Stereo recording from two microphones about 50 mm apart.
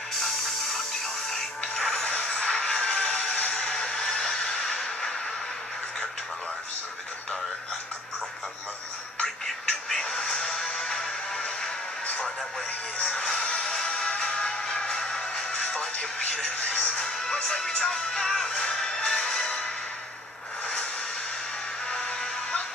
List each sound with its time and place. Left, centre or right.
1.8 s music: centre
2.0 s a sound: left
9.2 s music: centre
13.0 s music: left
16.5 s music: left
17.0 s music: centre
21.8 s music: centre